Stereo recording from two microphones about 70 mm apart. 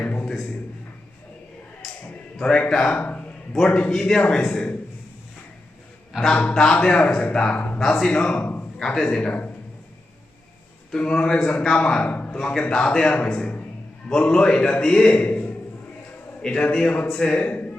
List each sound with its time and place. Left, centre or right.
0.0 s a man's voice: centre
1.8 s a man's voice: centre
3.9 s a man's voice: centre
6.1 s a man's voice: centre
7.8 s speech: centre
8.0 s a man's voice: centre
8.8 s speech: centre
10.9 s a man's voice: centre
13.4 s a man's voice: left